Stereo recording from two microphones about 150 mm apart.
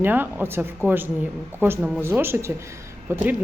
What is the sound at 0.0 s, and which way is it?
Speech, 15° right (ahead or behind).